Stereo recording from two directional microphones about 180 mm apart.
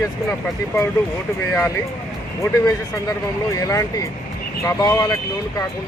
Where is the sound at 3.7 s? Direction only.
20° left (ahead or behind).